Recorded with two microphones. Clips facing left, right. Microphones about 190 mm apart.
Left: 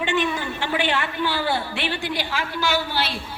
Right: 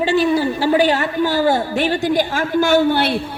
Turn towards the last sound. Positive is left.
turn(degrees=-55)  # may be behind; listen again after turning